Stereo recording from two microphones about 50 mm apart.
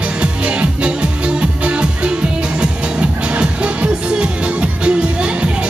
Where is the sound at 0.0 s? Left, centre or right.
Right.